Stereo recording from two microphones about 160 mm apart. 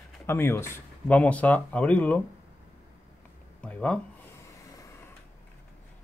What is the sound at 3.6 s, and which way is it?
Speech, 5° left (ahead or behind).